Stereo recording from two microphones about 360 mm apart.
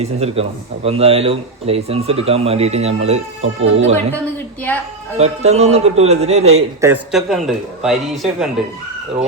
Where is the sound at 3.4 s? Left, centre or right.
Right.